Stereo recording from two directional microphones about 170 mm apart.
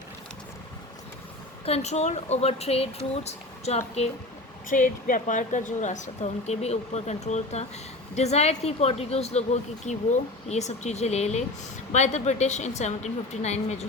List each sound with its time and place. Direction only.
1.6 s speech: 40° left (ahead or behind)
4.7 s speech: 50° left (ahead or behind)